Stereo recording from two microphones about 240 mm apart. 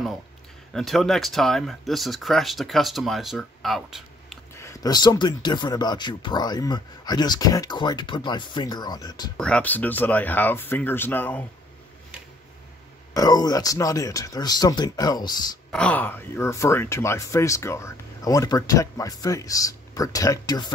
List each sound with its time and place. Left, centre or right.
0.7 s speech: centre
4.6 s speech: centre
9.4 s speech: centre
13.1 s speech: centre
15.7 s speech: centre